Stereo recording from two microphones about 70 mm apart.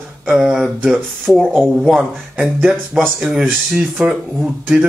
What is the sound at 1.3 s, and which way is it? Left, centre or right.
Speech, centre.